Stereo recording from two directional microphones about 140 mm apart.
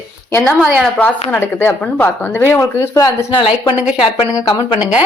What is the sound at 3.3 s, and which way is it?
Speech, 40° left (ahead or behind).